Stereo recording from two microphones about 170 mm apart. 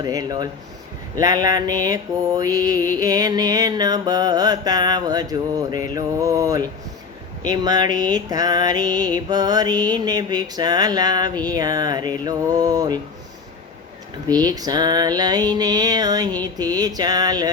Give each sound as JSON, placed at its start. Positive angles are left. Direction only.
{"t": 0.0, "sound": "music", "side_deg": -25}
{"t": 14.3, "sound": "music", "side_deg": -25}